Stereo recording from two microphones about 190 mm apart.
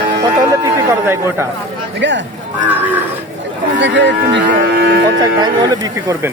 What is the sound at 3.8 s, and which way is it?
Speech, 65° right (ahead or behind).